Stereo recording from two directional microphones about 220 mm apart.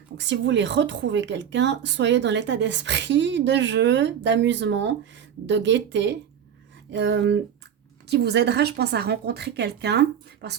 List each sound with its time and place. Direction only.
0.2 s speech: 55° right (ahead or behind)